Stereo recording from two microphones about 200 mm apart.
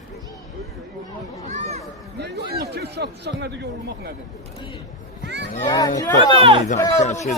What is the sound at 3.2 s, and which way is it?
Speech, 60° right (ahead or behind).